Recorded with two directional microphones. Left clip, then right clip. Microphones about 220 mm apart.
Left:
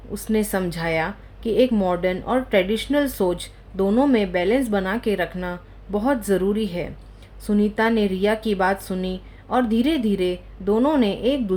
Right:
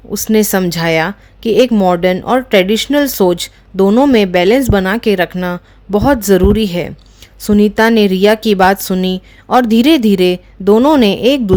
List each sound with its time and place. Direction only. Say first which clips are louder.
0.1 s speech: right 11 dB; 45° right (ahead or behind)